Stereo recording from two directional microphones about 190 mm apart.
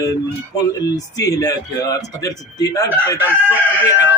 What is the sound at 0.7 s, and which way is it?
A man's voice, 20° left (ahead or behind).